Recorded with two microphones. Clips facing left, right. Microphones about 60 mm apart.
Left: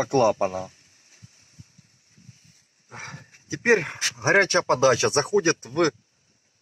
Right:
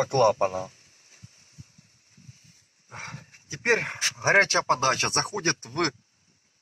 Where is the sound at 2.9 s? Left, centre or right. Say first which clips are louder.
Left 1 dB; left.